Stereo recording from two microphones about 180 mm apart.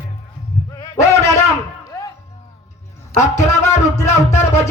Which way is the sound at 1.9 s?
15° left (ahead or behind).